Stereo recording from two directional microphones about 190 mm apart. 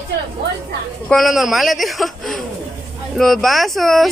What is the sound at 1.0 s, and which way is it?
A woman's voice, centre (ahead or behind).